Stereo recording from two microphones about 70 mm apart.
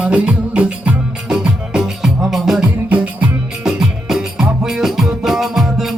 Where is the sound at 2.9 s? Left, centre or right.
Centre.